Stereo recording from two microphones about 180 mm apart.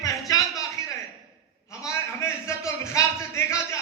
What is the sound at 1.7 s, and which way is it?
A man's voice, 15° left (ahead or behind).